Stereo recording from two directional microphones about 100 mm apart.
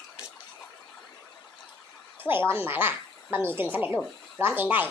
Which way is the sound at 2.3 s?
20° right (ahead or behind).